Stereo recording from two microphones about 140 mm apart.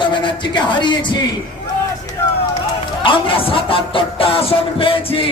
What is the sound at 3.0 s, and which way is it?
A man's voice, 40° left (ahead or behind).